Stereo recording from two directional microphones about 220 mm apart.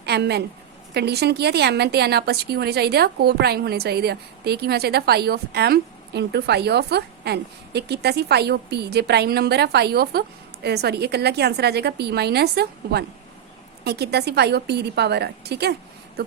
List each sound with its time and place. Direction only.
0.0 s a woman's voice: 50° right (ahead or behind)